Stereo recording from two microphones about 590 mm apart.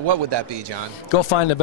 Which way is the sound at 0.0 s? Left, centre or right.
Right.